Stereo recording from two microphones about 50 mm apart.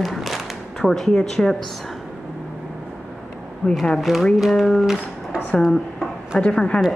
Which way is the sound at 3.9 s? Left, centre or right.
Centre.